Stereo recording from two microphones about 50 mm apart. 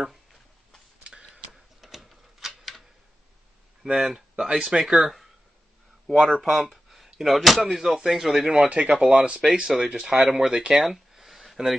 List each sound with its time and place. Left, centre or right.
1.0 s tick-tock: centre
1.5 s typewriter: centre
3.8 s speech: centre